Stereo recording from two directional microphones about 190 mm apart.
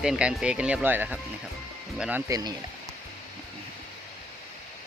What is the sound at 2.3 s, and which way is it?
Speech, 20° right (ahead or behind).